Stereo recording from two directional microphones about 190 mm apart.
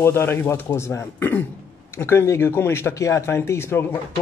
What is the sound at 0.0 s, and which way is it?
Speech, 10° left (ahead or behind).